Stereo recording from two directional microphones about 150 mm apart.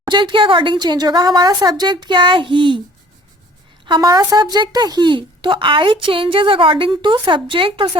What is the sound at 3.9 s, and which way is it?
A woman's voice, 30° right (ahead or behind).